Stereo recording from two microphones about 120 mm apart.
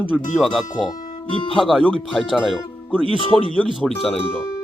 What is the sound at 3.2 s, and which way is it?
Speech, 50° left (ahead or behind).